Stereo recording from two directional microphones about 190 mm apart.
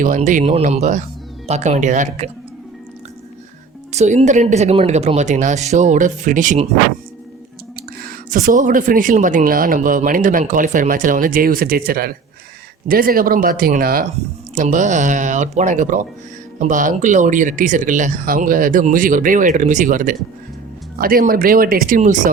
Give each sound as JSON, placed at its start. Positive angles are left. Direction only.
{"t": 0.0, "sound": "speech", "side_deg": -40}
{"t": 3.9, "sound": "speech", "side_deg": -35}
{"t": 7.8, "sound": "speech", "side_deg": -45}